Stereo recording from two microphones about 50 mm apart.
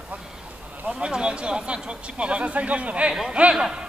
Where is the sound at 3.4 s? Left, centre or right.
Right.